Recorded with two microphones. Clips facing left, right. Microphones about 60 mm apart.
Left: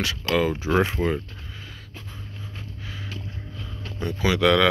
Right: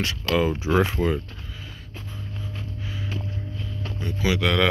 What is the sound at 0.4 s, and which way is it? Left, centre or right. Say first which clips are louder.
Speech: even; left.